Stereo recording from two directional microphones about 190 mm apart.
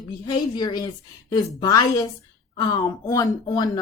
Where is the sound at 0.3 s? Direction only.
20° left (ahead or behind).